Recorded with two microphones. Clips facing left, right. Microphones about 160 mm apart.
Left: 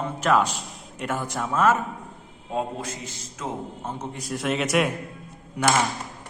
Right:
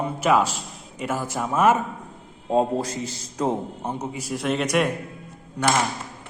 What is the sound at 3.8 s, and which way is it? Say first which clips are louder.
Speech: right 4 dB; 15° right (ahead or behind).